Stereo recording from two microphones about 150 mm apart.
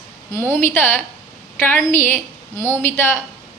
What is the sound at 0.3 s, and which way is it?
A woman's voice, 15° left (ahead or behind).